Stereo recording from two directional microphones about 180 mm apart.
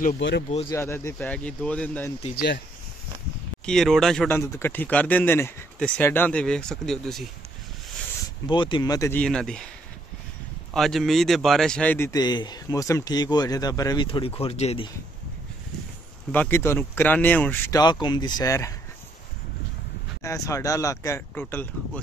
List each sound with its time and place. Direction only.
0.2 s speech: 90° left
0.7 s speech: 15° left (ahead or behind)
2.3 s speech: 65° left (ahead or behind)
3.6 s speech: centre (ahead or behind)
4.4 s speech: 15° left (ahead or behind)
8.5 s speech: 25° left (ahead or behind)
9.2 s speech: 5° left (ahead or behind)
10.7 s speech: centre (ahead or behind)
12.1 s speech: 25° left (ahead or behind)
14.0 s speech: 30° left (ahead or behind)
16.3 s speech: 10° left (ahead or behind)
20.2 s speech: 15° left (ahead or behind)